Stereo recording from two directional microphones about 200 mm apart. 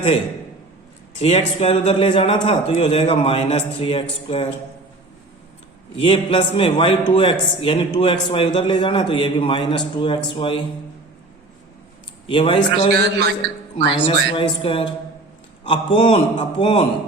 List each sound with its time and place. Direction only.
1.2 s a man's voice: 30° left (ahead or behind)
6.0 s a man's voice: 25° left (ahead or behind)
12.3 s a man's voice: 25° left (ahead or behind)